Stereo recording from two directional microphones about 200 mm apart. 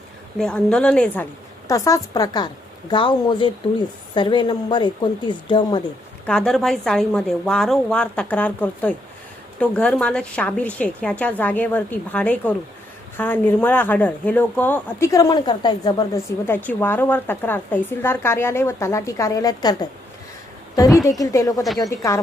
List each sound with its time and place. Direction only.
0.3 s speech: 5° left (ahead or behind); by 5.8 s 25° left (ahead or behind)
6.2 s speech: 5° left (ahead or behind)
21.2 s speech: 15° left (ahead or behind)